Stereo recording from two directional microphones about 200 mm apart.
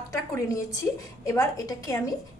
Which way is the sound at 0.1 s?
15° left (ahead or behind).